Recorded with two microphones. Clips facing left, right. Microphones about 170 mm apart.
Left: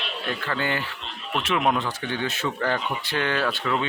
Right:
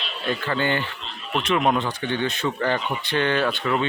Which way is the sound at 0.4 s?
Centre (ahead or behind).